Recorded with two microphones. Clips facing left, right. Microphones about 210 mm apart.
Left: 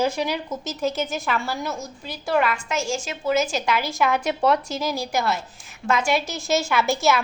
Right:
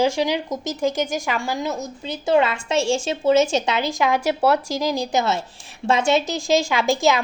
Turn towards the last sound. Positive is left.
turn(degrees=-15)  # may be behind; listen again after turning